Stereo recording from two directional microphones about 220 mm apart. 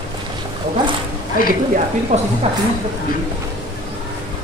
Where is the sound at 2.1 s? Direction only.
30° right (ahead or behind).